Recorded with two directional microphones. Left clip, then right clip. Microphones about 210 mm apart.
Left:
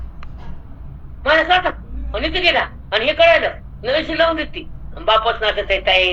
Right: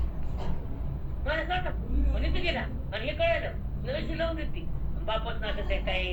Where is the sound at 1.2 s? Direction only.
45° left (ahead or behind).